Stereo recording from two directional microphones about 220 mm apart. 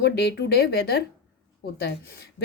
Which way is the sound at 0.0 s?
50° left (ahead or behind).